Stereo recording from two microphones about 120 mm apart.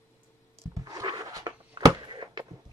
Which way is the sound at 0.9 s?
35° right (ahead or behind).